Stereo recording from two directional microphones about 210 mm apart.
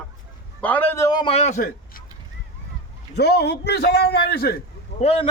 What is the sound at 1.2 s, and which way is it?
Speech, 30° left (ahead or behind).